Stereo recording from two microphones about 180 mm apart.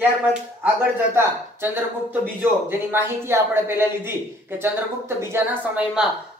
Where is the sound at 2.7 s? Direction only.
10° right (ahead or behind).